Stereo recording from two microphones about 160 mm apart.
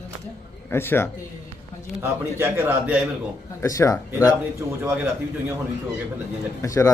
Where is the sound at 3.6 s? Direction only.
20° left (ahead or behind).